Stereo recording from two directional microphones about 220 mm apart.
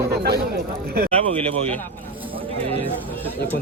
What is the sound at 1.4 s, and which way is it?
Speech, 25° right (ahead or behind).